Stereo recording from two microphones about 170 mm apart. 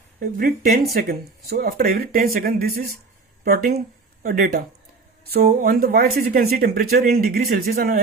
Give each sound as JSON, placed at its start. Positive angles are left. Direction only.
{"t": 0.2, "sound": "speech", "side_deg": -60}